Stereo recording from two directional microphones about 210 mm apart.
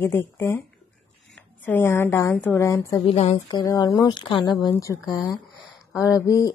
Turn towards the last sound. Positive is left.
turn(degrees=15)  # may be behind; listen again after turning